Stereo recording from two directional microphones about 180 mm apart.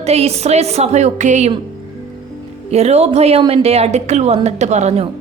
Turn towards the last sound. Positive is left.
turn(degrees=-35)  # may be behind; listen again after turning